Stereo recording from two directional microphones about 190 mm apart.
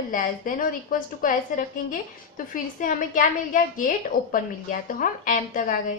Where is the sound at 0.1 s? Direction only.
45° left (ahead or behind).